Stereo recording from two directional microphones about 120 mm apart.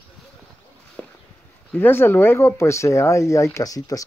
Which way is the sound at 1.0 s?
10° left (ahead or behind).